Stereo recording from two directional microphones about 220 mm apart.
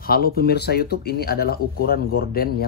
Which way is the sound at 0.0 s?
40° left (ahead or behind).